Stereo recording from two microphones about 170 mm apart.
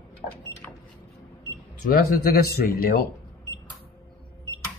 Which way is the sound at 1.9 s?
60° left (ahead or behind).